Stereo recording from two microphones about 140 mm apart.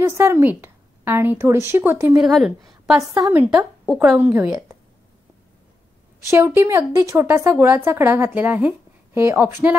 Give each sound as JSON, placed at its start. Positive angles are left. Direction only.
{"t": 0.0, "sound": "a woman's voice", "side_deg": -15}
{"t": 2.1, "sound": "a woman's voice", "side_deg": 0}
{"t": 3.2, "sound": "a woman's voice", "side_deg": -15}
{"t": 3.8, "sound": "a woman's voice", "side_deg": 0}
{"t": 4.2, "sound": "a woman's voice", "side_deg": -10}
{"t": 6.3, "sound": "a woman's voice", "side_deg": -15}